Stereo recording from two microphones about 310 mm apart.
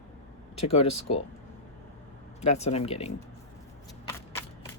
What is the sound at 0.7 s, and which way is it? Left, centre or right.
Speech, left.